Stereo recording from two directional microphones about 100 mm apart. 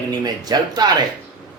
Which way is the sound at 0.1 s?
40° right (ahead or behind).